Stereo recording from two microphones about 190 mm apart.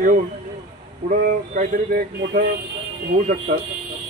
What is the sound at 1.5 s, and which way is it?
Speech, 50° right (ahead or behind).